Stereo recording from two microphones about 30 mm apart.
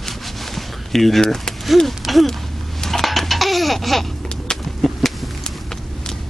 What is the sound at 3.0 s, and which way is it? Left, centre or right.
Laughter, centre.